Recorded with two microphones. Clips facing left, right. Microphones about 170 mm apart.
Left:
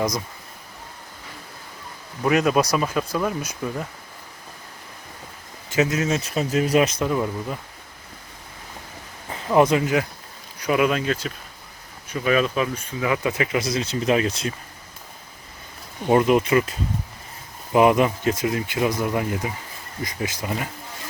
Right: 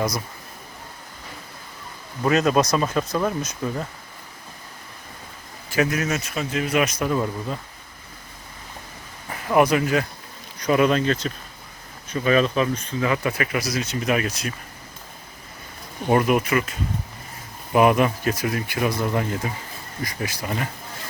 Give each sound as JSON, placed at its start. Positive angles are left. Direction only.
{"t": 2.2, "sound": "speech", "side_deg": 10}
{"t": 5.6, "sound": "speech", "side_deg": 20}
{"t": 7.1, "sound": "speech", "side_deg": 15}
{"t": 9.6, "sound": "speech", "side_deg": 20}
{"t": 10.6, "sound": "speech", "side_deg": 10}
{"t": 16.0, "sound": "speech", "side_deg": 20}
{"t": 17.7, "sound": "speech", "side_deg": 20}